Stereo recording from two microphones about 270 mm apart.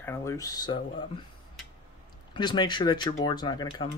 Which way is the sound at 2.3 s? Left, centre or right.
Centre.